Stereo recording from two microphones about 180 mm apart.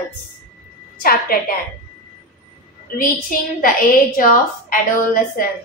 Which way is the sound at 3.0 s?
50° left (ahead or behind).